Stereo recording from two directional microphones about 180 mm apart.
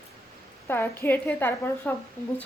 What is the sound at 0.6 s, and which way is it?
A woman's voice, 10° left (ahead or behind).